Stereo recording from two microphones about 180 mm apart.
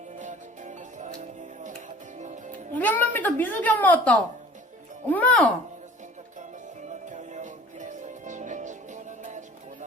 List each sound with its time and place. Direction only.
0.9 s music: 40° right (ahead or behind)
2.7 s a child's voice: 10° left (ahead or behind)
6.8 s music: 40° right (ahead or behind)